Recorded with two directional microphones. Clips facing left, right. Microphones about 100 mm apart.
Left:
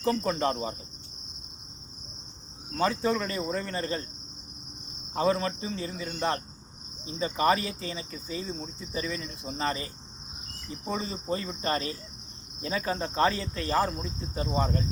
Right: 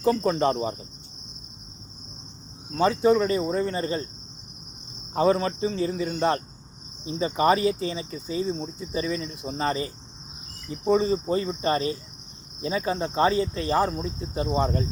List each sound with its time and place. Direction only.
0.0 s speech: 30° right (ahead or behind)
2.7 s speech: 25° right (ahead or behind)
5.1 s cricket: 30° right (ahead or behind)
7.0 s speech: 25° right (ahead or behind)